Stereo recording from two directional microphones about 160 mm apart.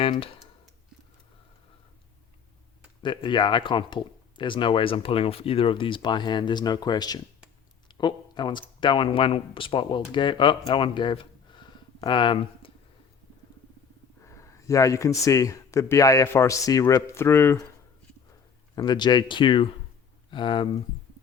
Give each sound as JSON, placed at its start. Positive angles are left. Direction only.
{"t": 3.0, "sound": "speech", "side_deg": 30}
{"t": 10.7, "sound": "a sound", "side_deg": 30}
{"t": 14.3, "sound": "speech", "side_deg": 20}
{"t": 18.8, "sound": "speech", "side_deg": 25}